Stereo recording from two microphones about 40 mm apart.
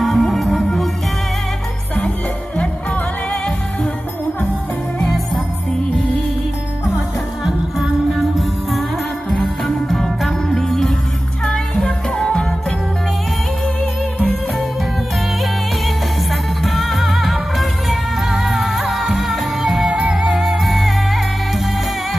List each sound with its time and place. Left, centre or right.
0.0 s music: centre
7.4 s music: centre
11.8 s music: left
16.6 s music: centre